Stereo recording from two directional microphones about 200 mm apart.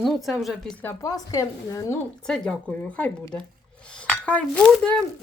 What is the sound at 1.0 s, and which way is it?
Speech, 15° left (ahead or behind).